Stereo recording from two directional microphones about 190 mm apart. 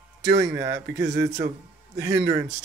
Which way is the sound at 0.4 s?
15° right (ahead or behind).